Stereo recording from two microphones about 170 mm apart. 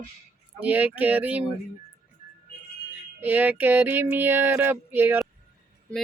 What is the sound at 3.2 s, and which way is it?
Female singing, 10° right (ahead or behind).